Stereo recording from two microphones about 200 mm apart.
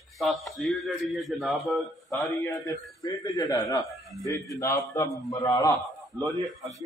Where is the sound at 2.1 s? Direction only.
15° left (ahead or behind).